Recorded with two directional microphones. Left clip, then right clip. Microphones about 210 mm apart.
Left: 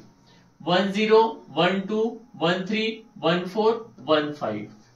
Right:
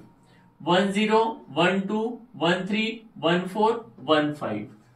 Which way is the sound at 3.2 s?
15° left (ahead or behind).